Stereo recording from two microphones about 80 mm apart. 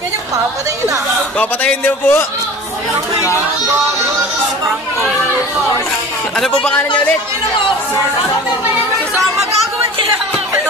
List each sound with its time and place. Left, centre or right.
1.4 s a man's voice: left
6.6 s speech: centre